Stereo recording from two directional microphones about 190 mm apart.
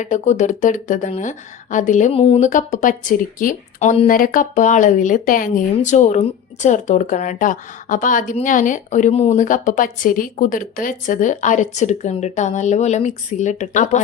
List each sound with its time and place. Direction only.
0.0 s speech: 40° left (ahead or behind)
2.5 s speech: 45° left (ahead or behind)